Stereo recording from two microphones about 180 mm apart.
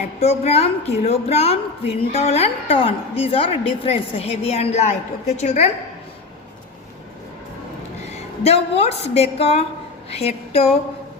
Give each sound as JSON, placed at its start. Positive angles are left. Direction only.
{"t": 0.2, "sound": "a woman's voice", "side_deg": 35}
{"t": 8.1, "sound": "a woman's voice", "side_deg": 35}